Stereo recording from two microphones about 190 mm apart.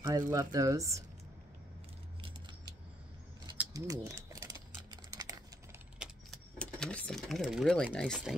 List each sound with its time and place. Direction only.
0.0 s speech: 15° right (ahead or behind)
3.7 s typing: 15° right (ahead or behind)
5.9 s sewing machine: centre (ahead or behind)